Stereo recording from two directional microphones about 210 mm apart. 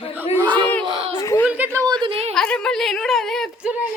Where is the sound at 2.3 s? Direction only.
5° left (ahead or behind).